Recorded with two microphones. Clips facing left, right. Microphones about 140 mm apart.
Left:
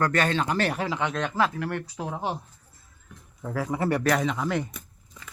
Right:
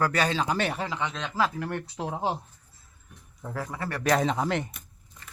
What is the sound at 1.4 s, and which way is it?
Speech, 20° right (ahead or behind).